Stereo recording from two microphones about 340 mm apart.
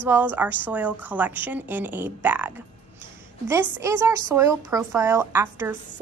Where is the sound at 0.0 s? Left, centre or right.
Centre.